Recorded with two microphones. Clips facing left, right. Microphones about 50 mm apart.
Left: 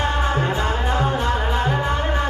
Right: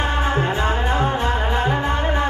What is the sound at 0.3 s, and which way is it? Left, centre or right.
Music, centre.